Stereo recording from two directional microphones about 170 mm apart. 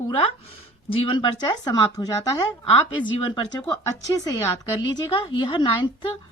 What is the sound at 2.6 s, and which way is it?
A woman's voice, 30° left (ahead or behind).